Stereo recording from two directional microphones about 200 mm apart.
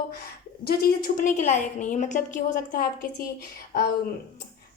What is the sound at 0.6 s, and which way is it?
A woman's voice, 50° left (ahead or behind).